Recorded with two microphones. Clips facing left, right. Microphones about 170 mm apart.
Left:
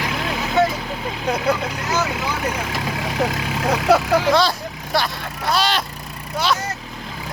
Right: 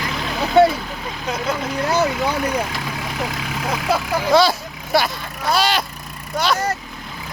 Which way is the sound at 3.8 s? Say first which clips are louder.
Left 6 dB; 75° left (ahead or behind).